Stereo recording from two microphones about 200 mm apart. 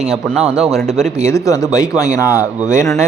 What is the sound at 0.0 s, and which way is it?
A man's voice, centre (ahead or behind).